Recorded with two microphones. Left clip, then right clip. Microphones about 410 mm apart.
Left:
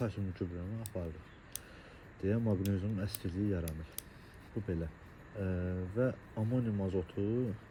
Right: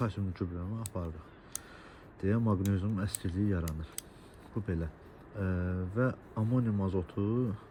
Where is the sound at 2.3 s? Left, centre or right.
Right.